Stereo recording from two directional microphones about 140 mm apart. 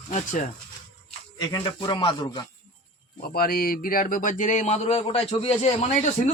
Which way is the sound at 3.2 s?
90° left.